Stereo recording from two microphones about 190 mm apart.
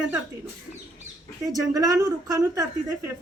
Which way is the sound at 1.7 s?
20° right (ahead or behind).